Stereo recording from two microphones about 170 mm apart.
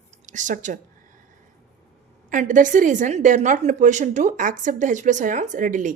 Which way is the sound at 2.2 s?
50° right (ahead or behind).